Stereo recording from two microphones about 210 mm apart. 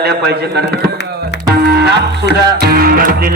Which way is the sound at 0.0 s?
50° right (ahead or behind).